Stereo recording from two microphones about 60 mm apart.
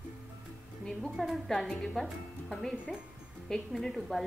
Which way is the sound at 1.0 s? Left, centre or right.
Centre.